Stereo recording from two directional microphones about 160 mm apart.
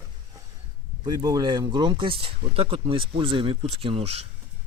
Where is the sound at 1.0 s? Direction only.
25° right (ahead or behind); by 4.3 s 40° right (ahead or behind).